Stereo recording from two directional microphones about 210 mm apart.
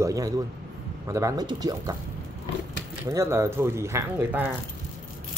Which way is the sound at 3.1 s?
15° right (ahead or behind).